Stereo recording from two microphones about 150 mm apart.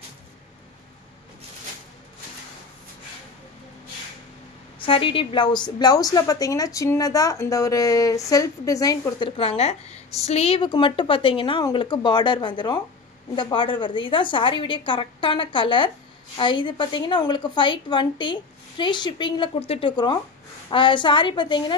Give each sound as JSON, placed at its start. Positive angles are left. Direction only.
{"t": 4.7, "sound": "a woman's voice", "side_deg": 35}
{"t": 9.4, "sound": "a woman's voice", "side_deg": 40}